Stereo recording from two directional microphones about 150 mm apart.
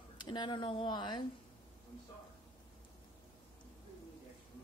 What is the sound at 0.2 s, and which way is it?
Speech, 30° left (ahead or behind).